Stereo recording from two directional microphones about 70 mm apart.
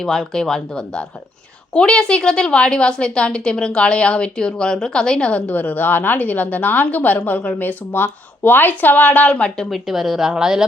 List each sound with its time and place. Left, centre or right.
0.0 s a woman's voice: centre
9.6 s a woman's voice: centre